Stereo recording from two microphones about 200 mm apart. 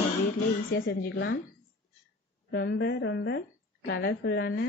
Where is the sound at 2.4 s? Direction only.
55° left (ahead or behind).